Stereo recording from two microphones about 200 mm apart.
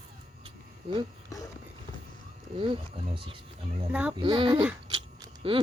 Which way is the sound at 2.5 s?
25° right (ahead or behind).